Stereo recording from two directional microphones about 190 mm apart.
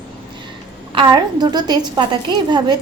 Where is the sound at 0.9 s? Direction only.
25° right (ahead or behind).